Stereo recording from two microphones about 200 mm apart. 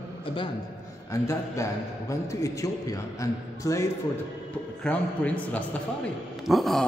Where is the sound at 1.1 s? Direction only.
15° left (ahead or behind).